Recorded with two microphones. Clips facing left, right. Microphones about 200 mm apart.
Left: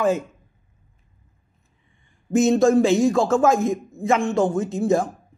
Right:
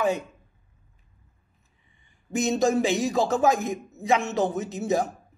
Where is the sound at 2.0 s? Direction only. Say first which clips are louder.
Left 8 dB; centre (ahead or behind).